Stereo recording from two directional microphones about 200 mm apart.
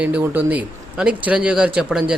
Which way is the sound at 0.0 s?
5° right (ahead or behind).